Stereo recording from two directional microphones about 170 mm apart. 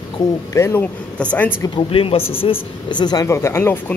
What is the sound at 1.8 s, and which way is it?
Speech, 30° left (ahead or behind).